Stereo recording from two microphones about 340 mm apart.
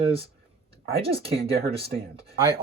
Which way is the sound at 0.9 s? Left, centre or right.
Centre.